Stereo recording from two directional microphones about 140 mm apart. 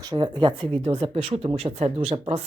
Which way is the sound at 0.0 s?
30° right (ahead or behind).